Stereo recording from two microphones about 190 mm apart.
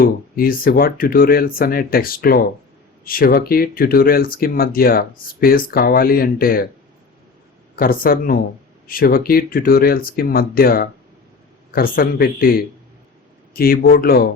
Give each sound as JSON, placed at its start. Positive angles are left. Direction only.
{"t": 0.0, "sound": "speech", "side_deg": 50}
{"t": 7.8, "sound": "speech", "side_deg": 50}